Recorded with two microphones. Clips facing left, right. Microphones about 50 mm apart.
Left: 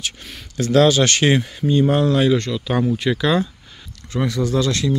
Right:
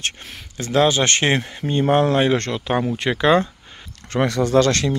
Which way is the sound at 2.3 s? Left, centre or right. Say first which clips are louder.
Left 1 dB; right.